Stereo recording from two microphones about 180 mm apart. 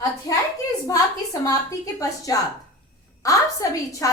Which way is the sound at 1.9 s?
20° left (ahead or behind).